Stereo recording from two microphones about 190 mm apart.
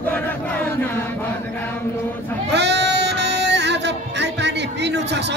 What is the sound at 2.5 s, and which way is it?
Music, 65° right (ahead or behind).